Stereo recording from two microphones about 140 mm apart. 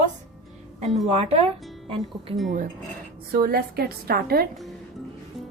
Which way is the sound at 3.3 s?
90° right.